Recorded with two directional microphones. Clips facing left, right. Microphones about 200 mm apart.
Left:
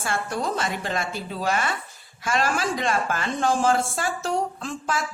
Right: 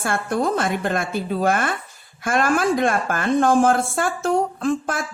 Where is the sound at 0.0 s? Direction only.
55° right (ahead or behind).